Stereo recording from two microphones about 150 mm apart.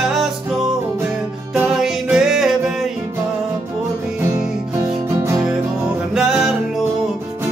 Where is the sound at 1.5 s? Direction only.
5° right (ahead or behind).